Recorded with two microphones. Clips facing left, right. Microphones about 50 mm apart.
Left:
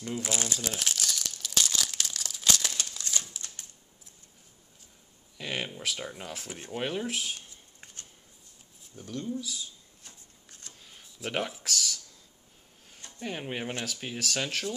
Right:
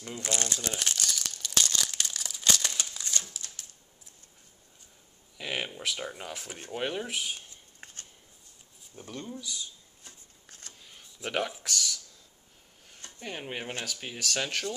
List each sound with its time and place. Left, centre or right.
0.0 s crumpling: centre
3.3 s typewriter: left
5.4 s speech: centre
7.8 s a sound: right
8.9 s speech: right
10.8 s a sound: centre
13.8 s speech: centre